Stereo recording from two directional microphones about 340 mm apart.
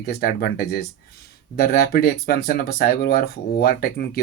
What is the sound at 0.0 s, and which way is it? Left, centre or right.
Speech, left.